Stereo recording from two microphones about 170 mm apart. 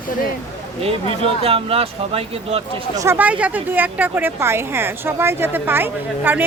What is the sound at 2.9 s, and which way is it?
Speech, 15° right (ahead or behind).